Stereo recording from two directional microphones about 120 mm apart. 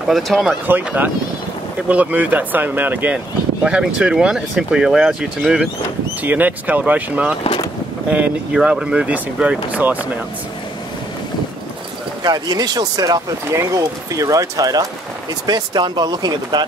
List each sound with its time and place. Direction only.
0.0 s speech: centre (ahead or behind)
0.7 s speech: 15° right (ahead or behind)
12.2 s speech: 35° right (ahead or behind)